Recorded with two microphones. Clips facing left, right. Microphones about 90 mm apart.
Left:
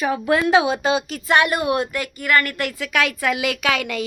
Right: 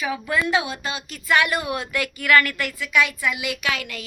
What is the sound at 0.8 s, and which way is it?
Speech, 90° left.